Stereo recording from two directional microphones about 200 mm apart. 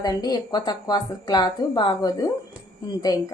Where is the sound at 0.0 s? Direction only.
20° left (ahead or behind).